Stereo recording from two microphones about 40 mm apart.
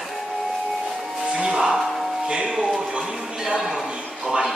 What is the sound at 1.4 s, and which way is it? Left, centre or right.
Music, centre.